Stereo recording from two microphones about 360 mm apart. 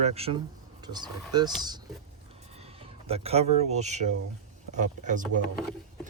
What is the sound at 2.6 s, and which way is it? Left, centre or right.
Speech, centre.